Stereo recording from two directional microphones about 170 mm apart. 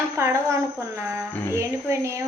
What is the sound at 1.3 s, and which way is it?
Speech, 10° left (ahead or behind).